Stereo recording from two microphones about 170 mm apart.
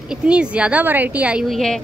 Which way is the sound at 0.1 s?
5° right (ahead or behind).